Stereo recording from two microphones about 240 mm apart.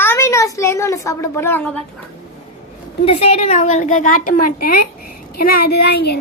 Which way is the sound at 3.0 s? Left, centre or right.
Left.